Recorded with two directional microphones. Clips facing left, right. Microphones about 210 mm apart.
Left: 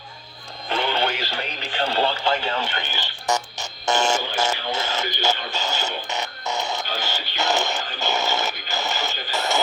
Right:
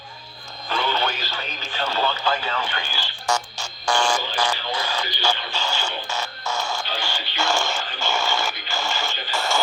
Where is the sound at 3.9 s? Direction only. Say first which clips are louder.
Left 1 dB; 25° left (ahead or behind).